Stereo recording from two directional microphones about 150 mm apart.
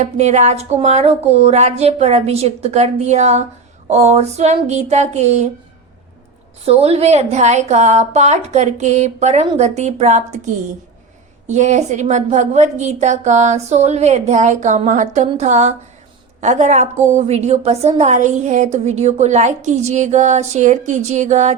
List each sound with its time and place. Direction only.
0.0 s a woman's voice: 50° right (ahead or behind)
6.7 s a woman's voice: 45° right (ahead or behind)